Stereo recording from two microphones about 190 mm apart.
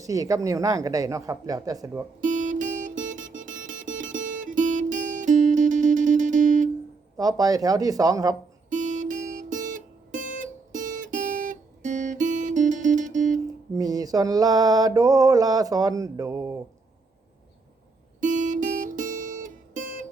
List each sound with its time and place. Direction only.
0.0 s a woman's voice: 20° right (ahead or behind)
2.2 s music: 40° right (ahead or behind)
7.2 s mantra: 20° right (ahead or behind)
8.7 s music: 40° right (ahead or behind)
13.7 s mantra: 20° right (ahead or behind)
18.2 s guitar: 40° right (ahead or behind)